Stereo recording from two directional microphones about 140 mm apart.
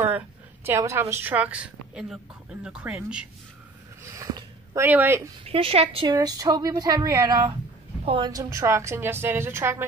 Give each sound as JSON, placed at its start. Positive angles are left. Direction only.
{"t": 0.7, "sound": "a woman's voice", "side_deg": -20}
{"t": 4.0, "sound": "a sound", "side_deg": -20}
{"t": 4.8, "sound": "a woman's voice", "side_deg": -15}
{"t": 5.4, "sound": "a woman's voice", "side_deg": -45}
{"t": 6.1, "sound": "a woman's voice", "side_deg": -25}
{"t": 8.3, "sound": "a woman's voice", "side_deg": -25}